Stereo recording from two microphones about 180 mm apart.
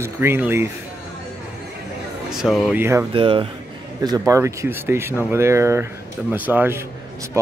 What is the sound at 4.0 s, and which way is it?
Speech, 20° right (ahead or behind).